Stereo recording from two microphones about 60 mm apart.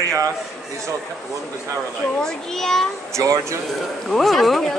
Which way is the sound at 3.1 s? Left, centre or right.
Right.